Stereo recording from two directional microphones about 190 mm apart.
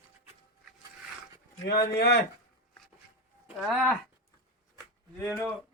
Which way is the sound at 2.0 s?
55° left (ahead or behind).